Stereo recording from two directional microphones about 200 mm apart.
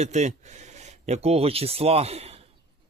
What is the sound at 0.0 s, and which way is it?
Speech, 35° right (ahead or behind).